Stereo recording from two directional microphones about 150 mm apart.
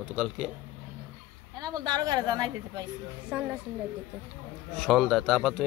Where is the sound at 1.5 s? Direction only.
25° right (ahead or behind).